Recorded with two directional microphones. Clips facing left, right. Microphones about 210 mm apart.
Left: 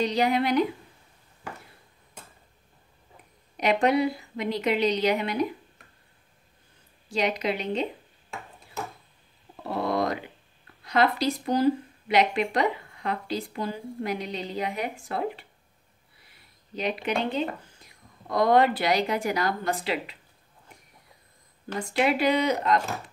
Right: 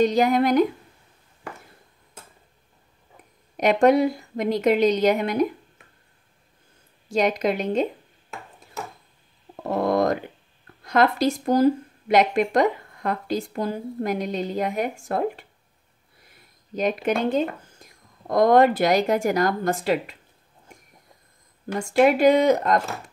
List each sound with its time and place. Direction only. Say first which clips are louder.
0.0 s speech: right 5 dB; 45° right (ahead or behind)
3.5 s speech: right 5 dB; 45° right (ahead or behind)
7.1 s speech: right 5 dB; 45° right (ahead or behind)
9.6 s a sound: right 5 dB; 45° right (ahead or behind)
10.8 s speech: right 4 dB; 45° right (ahead or behind)
16.2 s a sound: right 5 dB; 45° right (ahead or behind)
17.2 s speech: right 5 dB; 45° right (ahead or behind)
21.7 s speech: right 7 dB; 45° right (ahead or behind)